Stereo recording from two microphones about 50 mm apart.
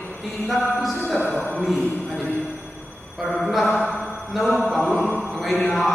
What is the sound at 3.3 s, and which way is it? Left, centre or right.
Mantra, centre.